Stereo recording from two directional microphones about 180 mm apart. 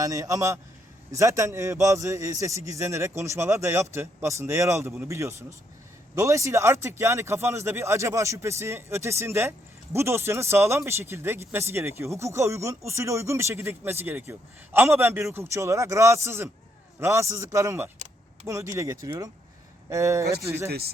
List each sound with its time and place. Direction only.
0.0 s speech: 20° right (ahead or behind)
20.7 s speech: 60° right (ahead or behind)